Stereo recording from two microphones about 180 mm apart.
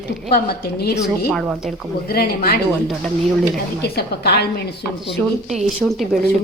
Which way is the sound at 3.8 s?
65° left (ahead or behind).